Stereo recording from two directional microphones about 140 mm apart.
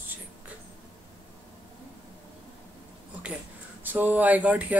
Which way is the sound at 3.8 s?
15° right (ahead or behind).